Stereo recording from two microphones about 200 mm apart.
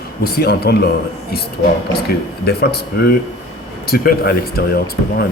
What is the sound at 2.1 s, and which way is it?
A man's voice, 55° left (ahead or behind).